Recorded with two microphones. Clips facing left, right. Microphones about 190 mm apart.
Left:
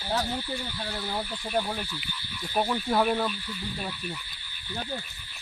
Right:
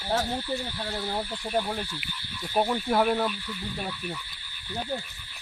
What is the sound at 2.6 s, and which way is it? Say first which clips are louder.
Speech: right 2 dB; 30° right (ahead or behind).